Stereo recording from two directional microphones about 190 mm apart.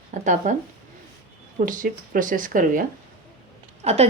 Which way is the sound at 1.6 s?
45° right (ahead or behind).